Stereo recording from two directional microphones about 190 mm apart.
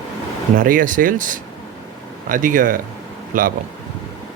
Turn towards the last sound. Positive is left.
turn(degrees=-45)  # may be behind; listen again after turning